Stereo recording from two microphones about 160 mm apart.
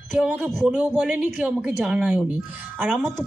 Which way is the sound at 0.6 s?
10° right (ahead or behind).